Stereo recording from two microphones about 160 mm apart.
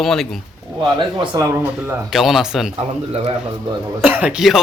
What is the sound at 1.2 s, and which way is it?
Speech, 20° right (ahead or behind).